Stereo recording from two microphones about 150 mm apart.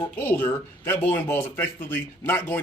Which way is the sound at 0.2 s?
15° left (ahead or behind).